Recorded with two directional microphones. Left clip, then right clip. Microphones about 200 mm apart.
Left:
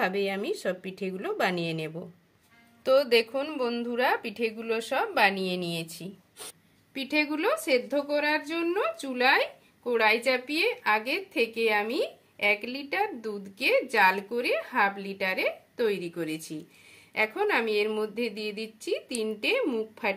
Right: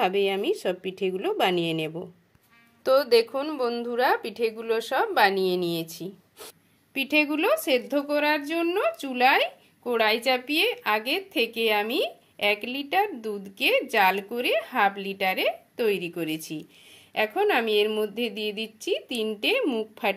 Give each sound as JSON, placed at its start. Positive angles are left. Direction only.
{"t": 0.0, "sound": "a woman's voice", "side_deg": -15}